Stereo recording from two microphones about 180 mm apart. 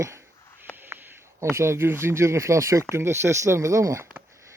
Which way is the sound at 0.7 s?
10° right (ahead or behind).